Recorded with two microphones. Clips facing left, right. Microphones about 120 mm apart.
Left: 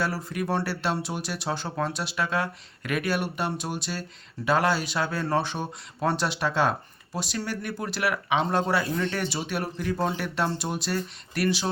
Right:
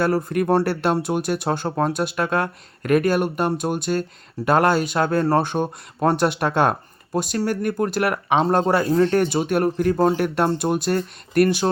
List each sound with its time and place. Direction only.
0.0 s speech: 55° right (ahead or behind)